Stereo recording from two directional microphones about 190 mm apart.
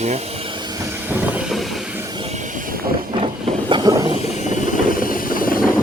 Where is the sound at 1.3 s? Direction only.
Centre (ahead or behind).